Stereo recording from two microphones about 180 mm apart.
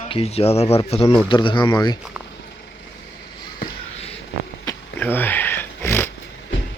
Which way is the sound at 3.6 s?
35° left (ahead or behind).